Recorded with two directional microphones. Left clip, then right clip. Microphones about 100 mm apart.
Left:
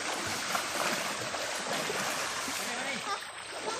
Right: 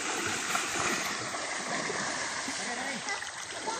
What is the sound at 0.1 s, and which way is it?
Stream, 50° left (ahead or behind).